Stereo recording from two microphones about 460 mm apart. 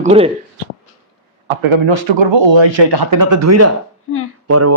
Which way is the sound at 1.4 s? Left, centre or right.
Right.